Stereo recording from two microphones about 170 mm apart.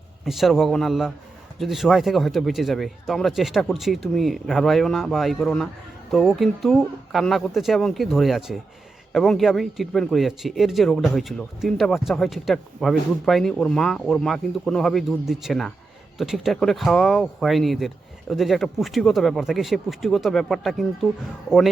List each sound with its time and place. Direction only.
0.3 s speech: centre (ahead or behind)